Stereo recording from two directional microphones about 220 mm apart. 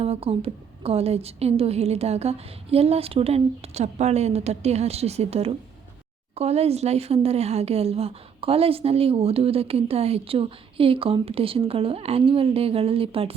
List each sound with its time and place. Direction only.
0.0 s speech: 25° right (ahead or behind)